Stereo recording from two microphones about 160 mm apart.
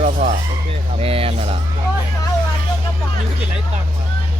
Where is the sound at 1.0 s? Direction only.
35° right (ahead or behind).